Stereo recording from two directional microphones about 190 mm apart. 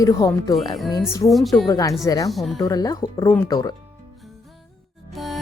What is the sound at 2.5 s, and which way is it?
Speech, 20° left (ahead or behind).